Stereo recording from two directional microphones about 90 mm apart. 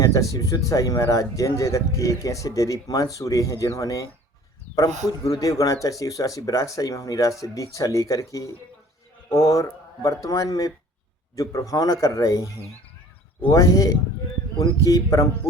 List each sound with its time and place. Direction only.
0.0 s speech: 35° left (ahead or behind)